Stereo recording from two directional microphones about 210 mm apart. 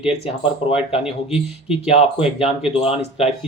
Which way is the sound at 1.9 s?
30° left (ahead or behind).